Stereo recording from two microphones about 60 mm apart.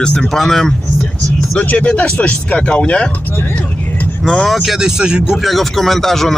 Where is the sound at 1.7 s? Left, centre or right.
Centre.